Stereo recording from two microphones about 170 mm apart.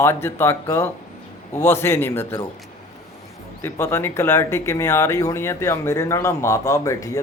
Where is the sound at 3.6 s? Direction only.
15° left (ahead or behind).